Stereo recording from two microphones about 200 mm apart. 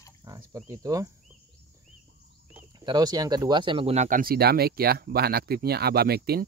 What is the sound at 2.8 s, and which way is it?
Speech, 20° right (ahead or behind).